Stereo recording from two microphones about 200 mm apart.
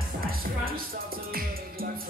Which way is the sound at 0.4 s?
45° right (ahead or behind).